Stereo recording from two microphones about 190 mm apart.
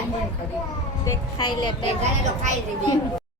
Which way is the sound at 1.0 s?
20° left (ahead or behind).